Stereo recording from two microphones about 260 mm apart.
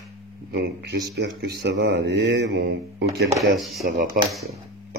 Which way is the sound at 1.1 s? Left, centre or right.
Right.